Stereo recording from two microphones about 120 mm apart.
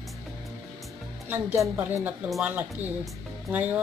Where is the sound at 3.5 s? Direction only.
15° right (ahead or behind).